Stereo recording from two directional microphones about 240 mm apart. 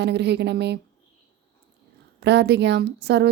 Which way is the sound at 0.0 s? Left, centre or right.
Right.